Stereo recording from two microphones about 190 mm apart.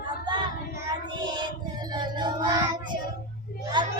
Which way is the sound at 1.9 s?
25° right (ahead or behind).